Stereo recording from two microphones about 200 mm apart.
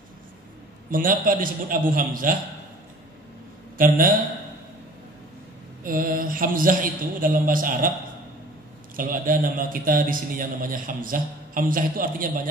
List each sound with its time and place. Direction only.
0.8 s a man's voice: 45° right (ahead or behind)
3.7 s a man's voice: 45° right (ahead or behind)
5.9 s a man's voice: 45° right (ahead or behind)
8.9 s a man's voice: 45° right (ahead or behind)